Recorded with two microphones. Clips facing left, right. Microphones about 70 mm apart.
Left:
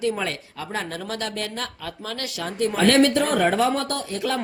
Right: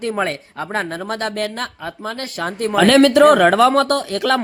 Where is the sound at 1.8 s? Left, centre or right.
Right.